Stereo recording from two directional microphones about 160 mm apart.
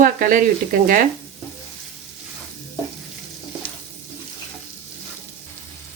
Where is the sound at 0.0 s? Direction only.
55° right (ahead or behind).